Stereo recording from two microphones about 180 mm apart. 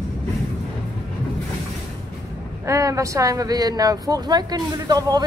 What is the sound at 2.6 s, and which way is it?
Speech, 15° right (ahead or behind).